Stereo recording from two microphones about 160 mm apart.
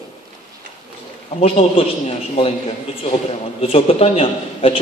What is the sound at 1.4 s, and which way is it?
Speech, 35° left (ahead or behind).